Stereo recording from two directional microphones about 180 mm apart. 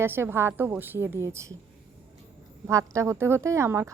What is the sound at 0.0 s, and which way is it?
A woman's voice, 10° right (ahead or behind).